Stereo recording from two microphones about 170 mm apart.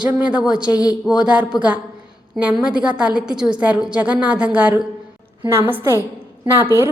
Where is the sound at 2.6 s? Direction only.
5° right (ahead or behind).